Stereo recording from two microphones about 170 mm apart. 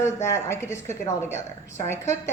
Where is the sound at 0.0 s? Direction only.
15° left (ahead or behind).